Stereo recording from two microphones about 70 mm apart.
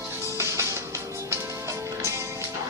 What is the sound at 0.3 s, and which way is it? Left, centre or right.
Music, right.